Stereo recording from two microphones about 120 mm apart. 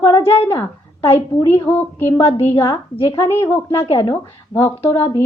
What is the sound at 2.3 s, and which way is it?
Speech, 20° left (ahead or behind).